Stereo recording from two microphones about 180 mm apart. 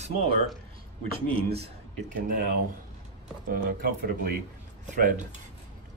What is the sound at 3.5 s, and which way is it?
Speech, 55° right (ahead or behind).